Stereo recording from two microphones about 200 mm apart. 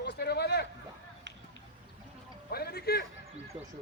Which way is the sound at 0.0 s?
55° left (ahead or behind).